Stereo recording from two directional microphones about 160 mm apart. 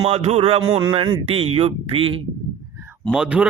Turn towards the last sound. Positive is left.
turn(degrees=-5)  # may be behind; listen again after turning